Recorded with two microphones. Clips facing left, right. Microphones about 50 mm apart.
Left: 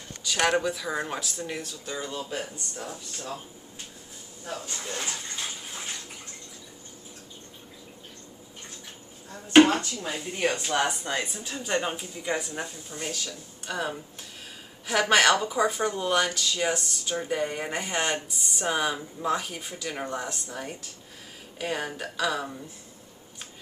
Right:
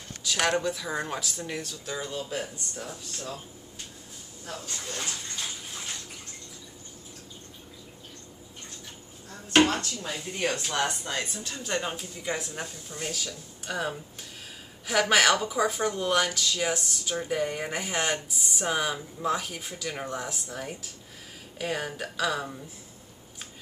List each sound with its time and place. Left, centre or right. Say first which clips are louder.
0.2 s speech: left 2 dB; centre
4.5 s speech: left 3 dB; centre
9.6 s speech: left 5 dB; centre